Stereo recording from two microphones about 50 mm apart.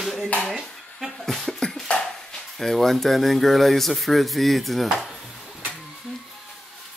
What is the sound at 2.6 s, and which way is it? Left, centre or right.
Speech, centre.